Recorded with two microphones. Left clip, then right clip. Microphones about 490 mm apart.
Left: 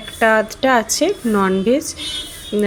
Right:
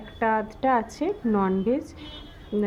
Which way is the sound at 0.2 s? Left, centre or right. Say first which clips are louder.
Left 10 dB; right.